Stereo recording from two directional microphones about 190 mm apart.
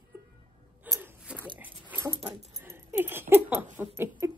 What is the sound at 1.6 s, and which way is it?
Dog, 10° right (ahead or behind).